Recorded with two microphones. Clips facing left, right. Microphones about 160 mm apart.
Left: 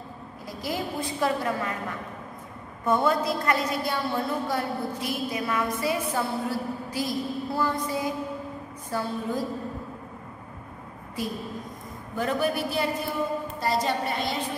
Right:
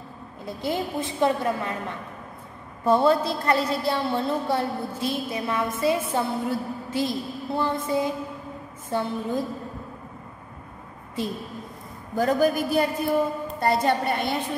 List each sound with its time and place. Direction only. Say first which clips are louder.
0.5 s a woman's voice: right 3 dB; 25° right (ahead or behind)
11.2 s a woman's voice: right 3 dB; 25° right (ahead or behind)
12.2 s a man's voice: right 5 dB; 40° right (ahead or behind)
13.6 s a woman's voice: right 5 dB; 60° right (ahead or behind)